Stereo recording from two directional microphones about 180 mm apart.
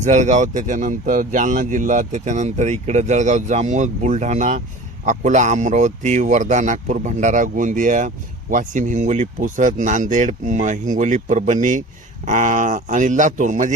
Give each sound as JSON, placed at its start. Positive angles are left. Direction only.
{"t": 0.0, "sound": "speech", "side_deg": -40}